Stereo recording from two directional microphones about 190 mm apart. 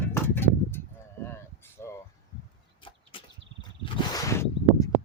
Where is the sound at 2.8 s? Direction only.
30° left (ahead or behind).